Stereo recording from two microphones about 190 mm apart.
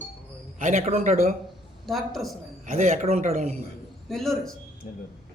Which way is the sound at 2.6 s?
40° right (ahead or behind).